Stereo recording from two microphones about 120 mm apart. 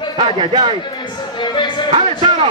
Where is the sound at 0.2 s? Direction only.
45° right (ahead or behind).